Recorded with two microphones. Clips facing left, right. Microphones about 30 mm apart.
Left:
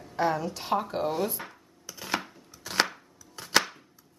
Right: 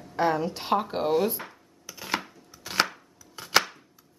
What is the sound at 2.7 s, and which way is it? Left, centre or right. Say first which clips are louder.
Chopping: right 1 dB; centre.